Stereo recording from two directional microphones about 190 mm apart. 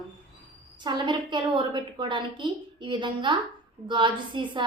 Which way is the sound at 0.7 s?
25° right (ahead or behind).